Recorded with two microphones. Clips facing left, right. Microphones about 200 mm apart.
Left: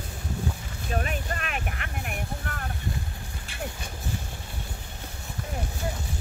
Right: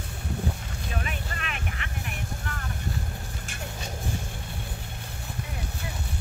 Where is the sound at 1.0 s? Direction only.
45° left (ahead or behind).